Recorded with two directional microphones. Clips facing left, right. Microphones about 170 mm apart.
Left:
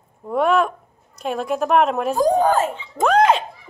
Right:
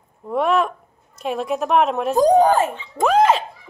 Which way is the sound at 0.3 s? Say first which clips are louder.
Left 1 dB; centre (ahead or behind).